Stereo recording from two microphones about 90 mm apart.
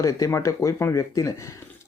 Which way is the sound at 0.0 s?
35° left (ahead or behind).